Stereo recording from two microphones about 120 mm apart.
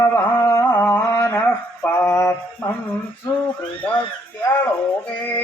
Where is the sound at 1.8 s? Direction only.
20° left (ahead or behind).